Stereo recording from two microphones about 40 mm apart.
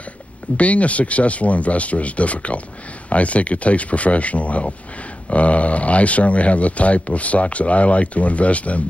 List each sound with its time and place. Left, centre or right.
0.6 s speech: left